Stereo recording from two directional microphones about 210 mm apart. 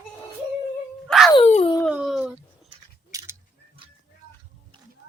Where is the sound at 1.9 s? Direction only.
5° right (ahead or behind).